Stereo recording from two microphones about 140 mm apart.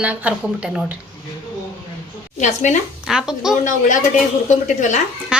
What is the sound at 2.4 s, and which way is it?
Speech, 60° left (ahead or behind).